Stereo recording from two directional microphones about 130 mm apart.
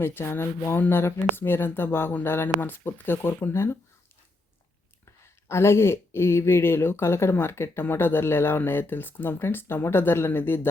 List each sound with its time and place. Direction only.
0.0 s speech: 15° left (ahead or behind)
5.5 s speech: 20° left (ahead or behind)